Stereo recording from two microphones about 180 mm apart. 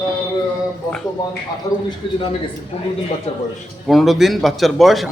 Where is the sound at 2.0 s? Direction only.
30° left (ahead or behind).